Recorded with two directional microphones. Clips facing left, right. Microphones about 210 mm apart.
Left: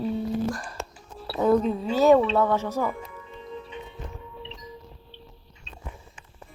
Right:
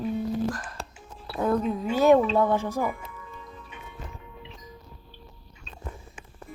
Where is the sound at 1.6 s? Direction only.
30° left (ahead or behind).